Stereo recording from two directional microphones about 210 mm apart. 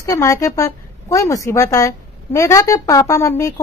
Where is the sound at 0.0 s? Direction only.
15° left (ahead or behind).